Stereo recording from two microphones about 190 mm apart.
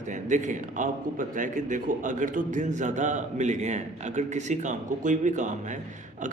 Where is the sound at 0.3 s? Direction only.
40° right (ahead or behind).